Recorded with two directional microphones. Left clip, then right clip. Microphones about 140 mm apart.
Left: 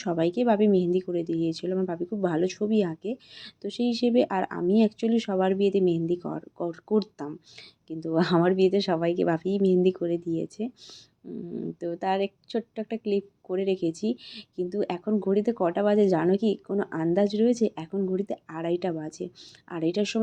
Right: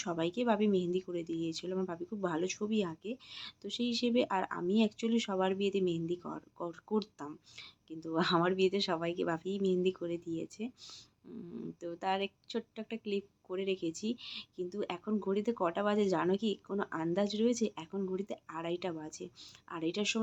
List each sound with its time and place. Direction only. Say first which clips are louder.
0.0 s speech: left 9 dB; 25° left (ahead or behind)